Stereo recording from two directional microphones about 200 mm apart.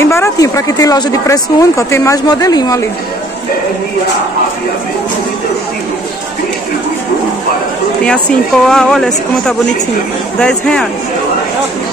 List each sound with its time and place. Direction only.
0.0 s speech: 15° left (ahead or behind)
8.6 s speech: 5° left (ahead or behind)